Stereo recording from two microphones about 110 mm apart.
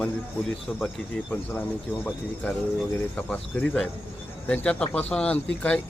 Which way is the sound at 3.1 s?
10° left (ahead or behind).